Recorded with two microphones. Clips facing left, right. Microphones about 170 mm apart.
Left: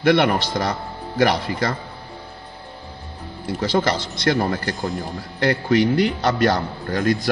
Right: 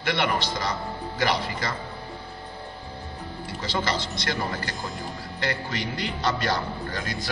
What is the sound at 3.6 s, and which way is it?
A man's voice, 60° left (ahead or behind).